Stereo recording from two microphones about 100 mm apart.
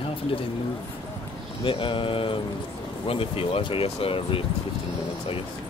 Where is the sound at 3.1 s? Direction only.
70° left (ahead or behind).